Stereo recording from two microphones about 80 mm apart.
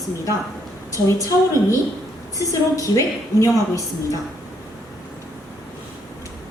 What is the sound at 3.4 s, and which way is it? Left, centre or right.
Speech, left.